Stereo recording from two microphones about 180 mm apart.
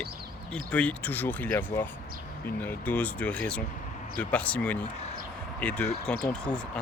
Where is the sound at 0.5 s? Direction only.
5° left (ahead or behind).